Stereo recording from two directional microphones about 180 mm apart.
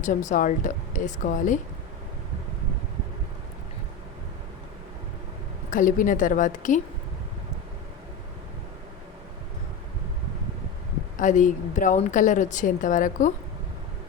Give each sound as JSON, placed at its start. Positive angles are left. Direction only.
{"t": 0.0, "sound": "a woman's voice", "side_deg": 45}
{"t": 5.7, "sound": "a woman's voice", "side_deg": 45}
{"t": 11.2, "sound": "a woman's voice", "side_deg": 45}